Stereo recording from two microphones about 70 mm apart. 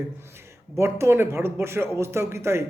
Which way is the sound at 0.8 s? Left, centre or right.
Right.